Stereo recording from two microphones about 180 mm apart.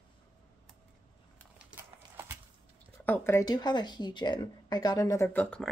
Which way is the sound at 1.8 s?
10° right (ahead or behind).